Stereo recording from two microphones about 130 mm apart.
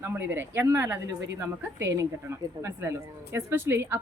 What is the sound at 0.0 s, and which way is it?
A woman's voice, 15° right (ahead or behind).